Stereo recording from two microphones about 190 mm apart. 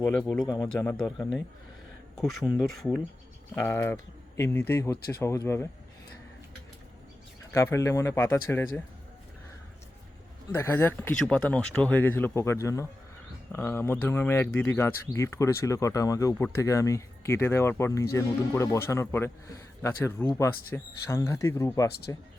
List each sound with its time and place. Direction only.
0.4 s speech: 20° left (ahead or behind)
3.5 s speech: 10° left (ahead or behind)
7.5 s speech: 15° left (ahead or behind)
10.5 s speech: 10° left (ahead or behind)